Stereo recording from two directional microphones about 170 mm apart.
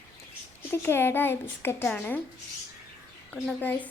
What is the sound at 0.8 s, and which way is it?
A child's voice, 15° left (ahead or behind).